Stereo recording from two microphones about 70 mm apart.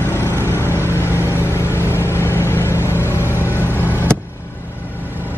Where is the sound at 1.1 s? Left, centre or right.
Left.